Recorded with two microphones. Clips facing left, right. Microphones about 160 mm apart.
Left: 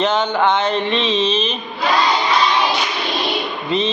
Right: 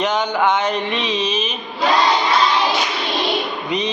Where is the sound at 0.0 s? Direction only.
10° right (ahead or behind).